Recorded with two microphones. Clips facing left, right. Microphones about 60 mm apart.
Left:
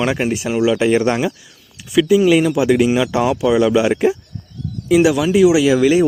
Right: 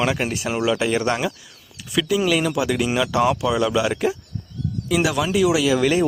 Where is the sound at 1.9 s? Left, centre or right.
Centre.